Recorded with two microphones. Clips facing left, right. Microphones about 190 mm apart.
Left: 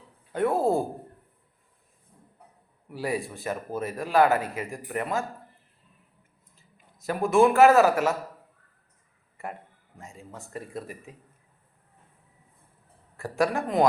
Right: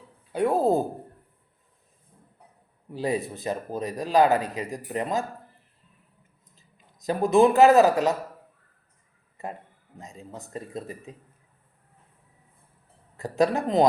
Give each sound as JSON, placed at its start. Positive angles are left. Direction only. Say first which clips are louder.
{"t": 0.3, "sound": "speech", "louder": "right 2 dB", "side_deg": -15}
{"t": 2.9, "sound": "a man's voice", "louder": "right 3 dB", "side_deg": -20}
{"t": 6.6, "sound": "speech", "louder": "left 1 dB", "side_deg": -20}
{"t": 9.4, "sound": "a man's voice", "louder": "right 1 dB", "side_deg": -20}
{"t": 13.1, "sound": "a man's voice", "louder": "right 3 dB", "side_deg": -20}